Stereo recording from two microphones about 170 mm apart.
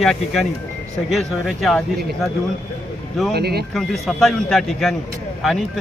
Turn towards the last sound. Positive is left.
turn(degrees=0)  # may be behind; listen again after turning